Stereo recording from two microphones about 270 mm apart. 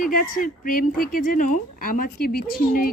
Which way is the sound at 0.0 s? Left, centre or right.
Left.